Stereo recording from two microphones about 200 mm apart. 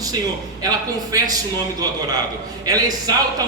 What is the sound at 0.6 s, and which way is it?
A man's voice, 20° right (ahead or behind).